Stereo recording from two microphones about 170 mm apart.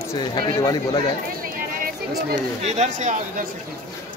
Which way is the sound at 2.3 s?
40° right (ahead or behind).